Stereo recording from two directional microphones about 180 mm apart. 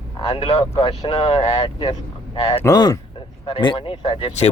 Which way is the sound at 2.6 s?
20° left (ahead or behind).